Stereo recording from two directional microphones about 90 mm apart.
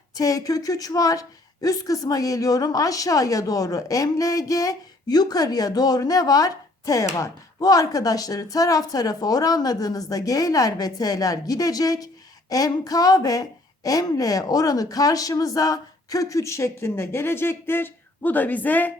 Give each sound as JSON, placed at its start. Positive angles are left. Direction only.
{"t": 0.1, "sound": "a woman's voice", "side_deg": 40}